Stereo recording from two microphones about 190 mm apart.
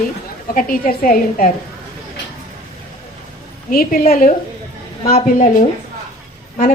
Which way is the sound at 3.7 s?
50° left (ahead or behind).